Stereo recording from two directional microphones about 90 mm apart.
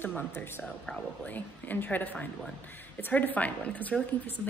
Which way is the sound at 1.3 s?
20° left (ahead or behind).